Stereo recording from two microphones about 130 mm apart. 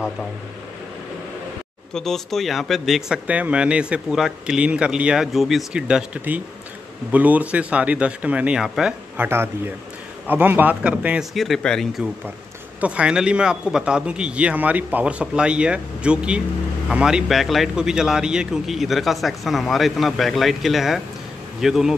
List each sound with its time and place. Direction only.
2.0 s a man's voice: 5° left (ahead or behind)
9.1 s a man's voice: 20° right (ahead or behind)
11.3 s a man's voice: centre (ahead or behind)
12.8 s a man's voice: 10° right (ahead or behind)